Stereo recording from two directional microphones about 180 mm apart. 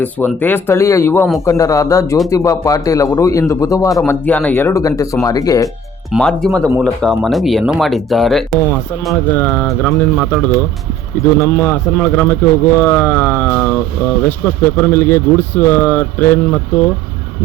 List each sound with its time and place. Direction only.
0.0 s a man's voice: 10° left (ahead or behind)
6.1 s a man's voice: 5° left (ahead or behind)
11.3 s a man's voice: 15° left (ahead or behind)